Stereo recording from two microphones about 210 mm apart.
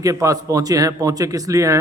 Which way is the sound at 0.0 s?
15° right (ahead or behind).